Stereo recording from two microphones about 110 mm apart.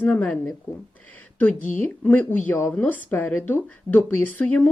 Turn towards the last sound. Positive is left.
turn(degrees=15)  # may be behind; listen again after turning